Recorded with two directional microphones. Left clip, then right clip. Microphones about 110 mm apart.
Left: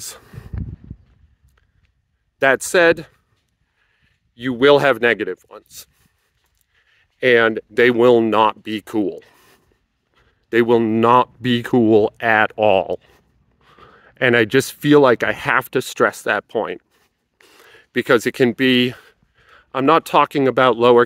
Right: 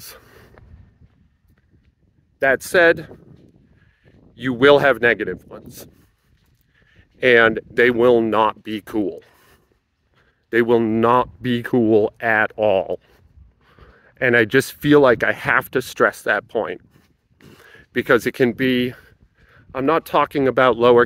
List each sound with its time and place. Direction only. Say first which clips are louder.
0.0 s a sound: left 5 dB; 40° left (ahead or behind)
2.5 s speech: right 1 dB; 25° left (ahead or behind)
4.4 s speech: even; centre (ahead or behind)
4.7 s speech: even; 20° left (ahead or behind)
6.8 s a sound: right 1 dB; 15° left (ahead or behind)
7.2 s speech: right 1 dB; 5° left (ahead or behind)
7.7 s speech: left 4 dB; 30° left (ahead or behind)
13.0 s a sound: left 2 dB; 35° left (ahead or behind)
14.3 s speech: right 1 dB; 15° left (ahead or behind)
18.6 s speech: left 4 dB; 40° left (ahead or behind); by 21.0 s 15° left (ahead or behind)